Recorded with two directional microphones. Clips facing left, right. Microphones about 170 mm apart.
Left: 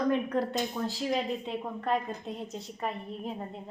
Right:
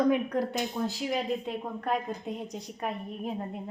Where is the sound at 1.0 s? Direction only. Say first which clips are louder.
Left 2 dB; 5° right (ahead or behind).